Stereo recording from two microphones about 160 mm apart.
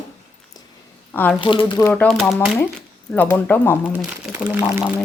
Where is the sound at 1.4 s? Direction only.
30° left (ahead or behind).